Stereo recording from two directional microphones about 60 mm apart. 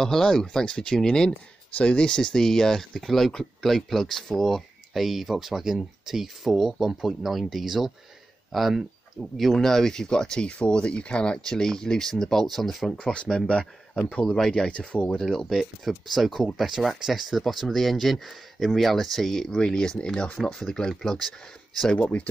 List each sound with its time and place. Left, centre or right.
0.0 s speech: centre
12.9 s speech: centre
14.2 s speech: centre
15.1 s speech: centre
21.9 s speech: left